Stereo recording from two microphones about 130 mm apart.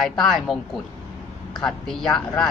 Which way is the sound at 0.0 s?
5° left (ahead or behind).